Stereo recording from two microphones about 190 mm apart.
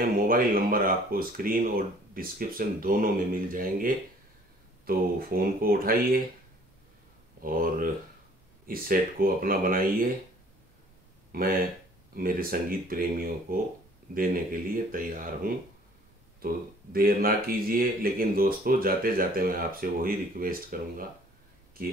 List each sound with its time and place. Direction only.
0.0 s speech: 50° right (ahead or behind)
7.4 s speech: 50° right (ahead or behind)
11.3 s speech: 50° right (ahead or behind)